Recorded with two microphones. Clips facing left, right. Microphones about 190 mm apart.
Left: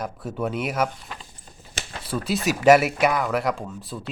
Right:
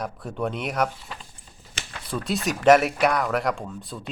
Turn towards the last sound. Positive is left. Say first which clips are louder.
# left 1 dB
turn(degrees=5)  # may be behind; listen again after turning